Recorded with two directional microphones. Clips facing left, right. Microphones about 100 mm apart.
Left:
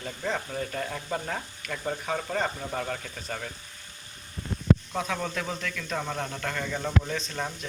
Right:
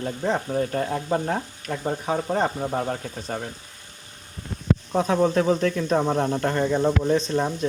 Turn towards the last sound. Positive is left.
turn(degrees=-30)  # may be behind; listen again after turning